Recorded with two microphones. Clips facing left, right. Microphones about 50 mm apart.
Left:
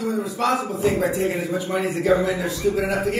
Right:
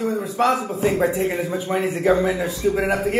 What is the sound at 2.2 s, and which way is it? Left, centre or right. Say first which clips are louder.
Speech: right 1 dB; centre.